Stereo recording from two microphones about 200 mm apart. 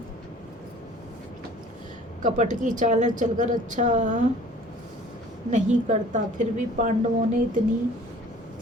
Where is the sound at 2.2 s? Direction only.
40° right (ahead or behind).